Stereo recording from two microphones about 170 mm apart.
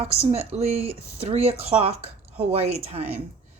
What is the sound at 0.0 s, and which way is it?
Speech, 35° right (ahead or behind).